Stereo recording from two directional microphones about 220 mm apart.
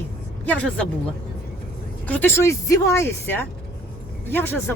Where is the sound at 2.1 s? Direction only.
10° left (ahead or behind).